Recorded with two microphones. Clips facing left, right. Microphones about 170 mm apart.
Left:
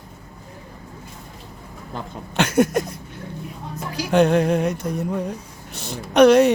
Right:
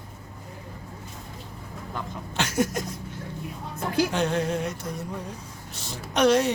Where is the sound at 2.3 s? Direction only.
60° left (ahead or behind).